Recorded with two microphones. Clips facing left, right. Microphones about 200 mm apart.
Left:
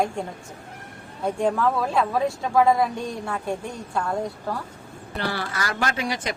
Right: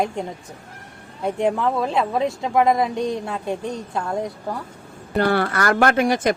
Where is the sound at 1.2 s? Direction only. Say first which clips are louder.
Right 1 dB; 15° right (ahead or behind).